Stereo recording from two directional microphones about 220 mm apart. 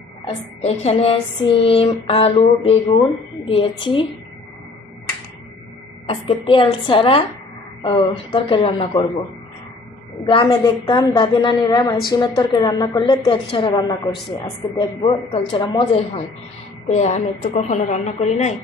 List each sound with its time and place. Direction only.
0.3 s a woman's voice: 30° left (ahead or behind)
6.0 s a woman's voice: 25° left (ahead or behind)
10.2 s a woman's voice: 20° left (ahead or behind)